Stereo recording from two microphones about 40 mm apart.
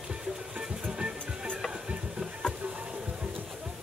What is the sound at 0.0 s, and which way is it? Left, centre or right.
Music, centre.